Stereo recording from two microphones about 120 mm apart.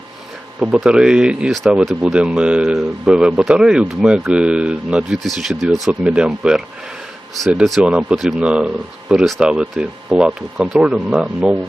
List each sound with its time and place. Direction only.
0.6 s speech: centre (ahead or behind)